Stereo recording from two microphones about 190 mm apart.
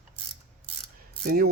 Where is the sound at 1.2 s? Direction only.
55° right (ahead or behind).